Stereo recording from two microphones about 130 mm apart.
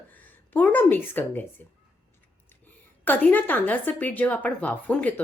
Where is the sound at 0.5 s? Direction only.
15° left (ahead or behind).